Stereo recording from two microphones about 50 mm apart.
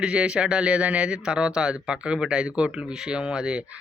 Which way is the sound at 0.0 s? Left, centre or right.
Right.